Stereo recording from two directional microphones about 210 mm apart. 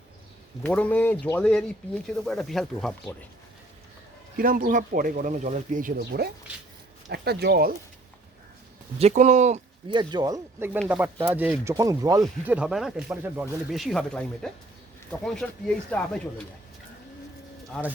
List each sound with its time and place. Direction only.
0.6 s speech: 5° left (ahead or behind)
4.4 s speech: 40° right (ahead or behind)
9.0 s speech: 35° right (ahead or behind)
9.9 s speech: 20° right (ahead or behind)
12.2 s speech: 5° right (ahead or behind)
17.7 s speech: centre (ahead or behind)